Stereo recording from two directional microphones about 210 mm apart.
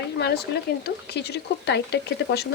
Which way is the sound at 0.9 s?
50° left (ahead or behind).